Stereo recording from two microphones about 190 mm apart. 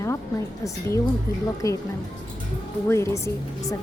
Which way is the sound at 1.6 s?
15° left (ahead or behind).